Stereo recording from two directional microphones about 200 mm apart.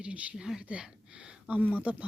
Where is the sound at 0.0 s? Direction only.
5° right (ahead or behind).